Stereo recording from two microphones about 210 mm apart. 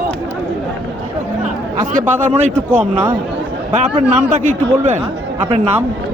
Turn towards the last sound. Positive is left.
turn(degrees=-30)  # may be behind; listen again after turning